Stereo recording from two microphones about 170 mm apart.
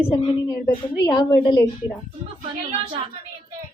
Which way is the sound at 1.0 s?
25° left (ahead or behind).